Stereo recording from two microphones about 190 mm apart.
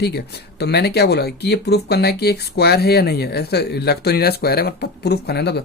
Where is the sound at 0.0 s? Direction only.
60° left (ahead or behind).